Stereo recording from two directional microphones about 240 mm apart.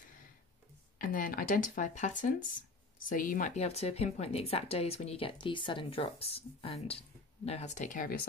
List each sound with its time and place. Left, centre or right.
0.9 s a woman's voice: left